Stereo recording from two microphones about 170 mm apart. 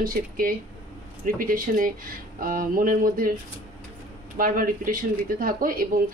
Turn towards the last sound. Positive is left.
turn(degrees=-55)  # may be behind; listen again after turning